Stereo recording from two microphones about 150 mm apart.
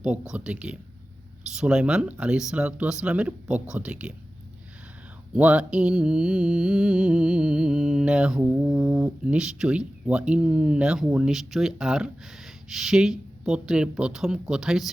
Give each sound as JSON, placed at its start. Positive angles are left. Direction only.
{"t": 0.0, "sound": "speech", "side_deg": -10}
{"t": 5.3, "sound": "mantra", "side_deg": -10}